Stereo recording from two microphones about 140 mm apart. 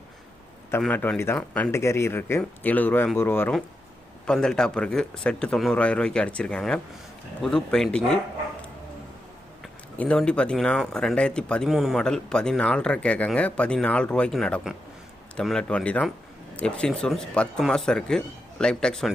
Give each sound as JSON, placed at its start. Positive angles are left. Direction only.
{"t": 0.8, "sound": "speech", "side_deg": 10}
{"t": 1.7, "sound": "speech", "side_deg": 20}
{"t": 10.0, "sound": "speech", "side_deg": 5}